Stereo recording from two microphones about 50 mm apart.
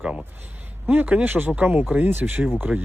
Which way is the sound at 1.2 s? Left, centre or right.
Right.